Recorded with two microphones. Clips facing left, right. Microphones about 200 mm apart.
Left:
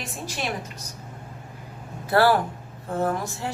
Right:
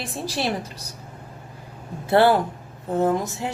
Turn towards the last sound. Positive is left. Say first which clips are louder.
# right 4 dB
turn(degrees=-20)  # may be behind; listen again after turning